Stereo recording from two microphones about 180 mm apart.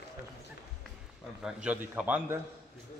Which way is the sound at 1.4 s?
5° right (ahead or behind).